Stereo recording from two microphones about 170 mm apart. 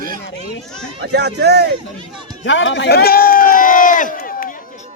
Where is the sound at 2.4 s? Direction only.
90° left; by 4.5 s 50° left (ahead or behind).